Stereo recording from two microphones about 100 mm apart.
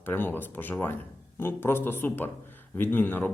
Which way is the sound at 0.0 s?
20° left (ahead or behind).